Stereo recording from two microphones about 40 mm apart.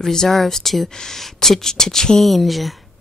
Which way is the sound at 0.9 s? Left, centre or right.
Centre.